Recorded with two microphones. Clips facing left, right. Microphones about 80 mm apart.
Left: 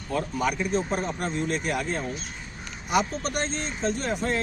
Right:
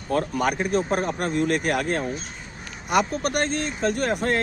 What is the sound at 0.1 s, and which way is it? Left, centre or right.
Speech, right.